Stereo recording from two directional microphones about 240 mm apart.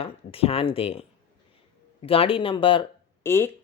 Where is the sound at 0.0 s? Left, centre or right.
Left.